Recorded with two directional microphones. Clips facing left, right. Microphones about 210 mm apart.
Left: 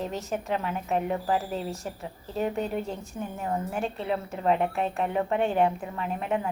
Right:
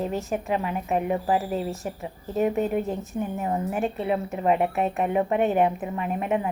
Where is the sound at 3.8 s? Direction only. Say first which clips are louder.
Right 4 dB; 5° right (ahead or behind).